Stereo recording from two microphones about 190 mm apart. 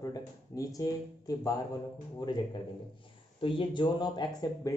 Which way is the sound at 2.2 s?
25° left (ahead or behind).